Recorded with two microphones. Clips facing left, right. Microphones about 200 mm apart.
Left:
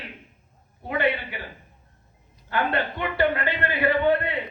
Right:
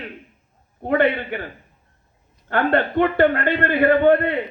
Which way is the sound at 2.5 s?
55° right (ahead or behind).